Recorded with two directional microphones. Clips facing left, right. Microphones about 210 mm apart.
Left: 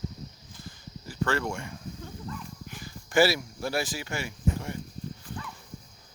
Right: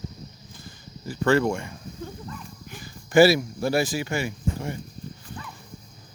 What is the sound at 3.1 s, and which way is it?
Speech, 15° right (ahead or behind).